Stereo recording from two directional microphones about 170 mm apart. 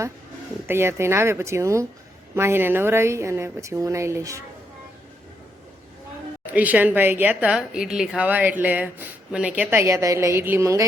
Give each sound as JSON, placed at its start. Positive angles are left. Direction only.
{"t": 0.7, "sound": "speech", "side_deg": -15}
{"t": 6.4, "sound": "speech", "side_deg": -10}